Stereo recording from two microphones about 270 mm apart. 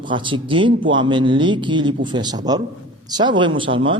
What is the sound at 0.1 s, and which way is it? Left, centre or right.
A man's voice, centre.